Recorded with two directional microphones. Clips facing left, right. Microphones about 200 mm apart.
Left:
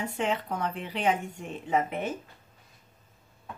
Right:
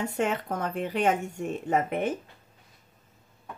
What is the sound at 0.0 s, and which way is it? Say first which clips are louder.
Speech: right 2 dB; 45° right (ahead or behind).